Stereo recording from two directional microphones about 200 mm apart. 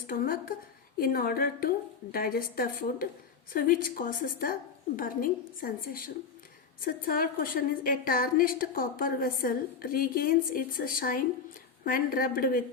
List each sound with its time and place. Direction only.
0.1 s a woman's voice: 45° left (ahead or behind)